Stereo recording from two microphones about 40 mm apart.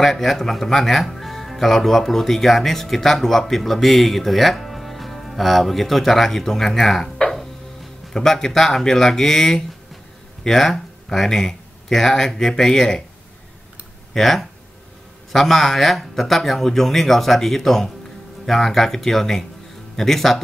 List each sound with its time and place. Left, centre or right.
0.0 s speech: centre
14.1 s speech: centre